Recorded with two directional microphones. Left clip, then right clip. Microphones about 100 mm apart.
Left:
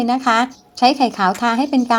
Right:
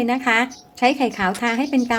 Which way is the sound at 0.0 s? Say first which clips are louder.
Left 3 dB; 30° left (ahead or behind).